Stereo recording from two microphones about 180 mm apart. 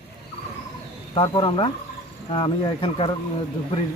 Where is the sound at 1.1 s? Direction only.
25° left (ahead or behind).